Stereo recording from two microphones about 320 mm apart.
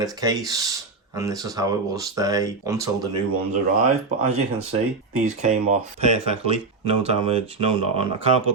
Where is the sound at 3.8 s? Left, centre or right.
Right.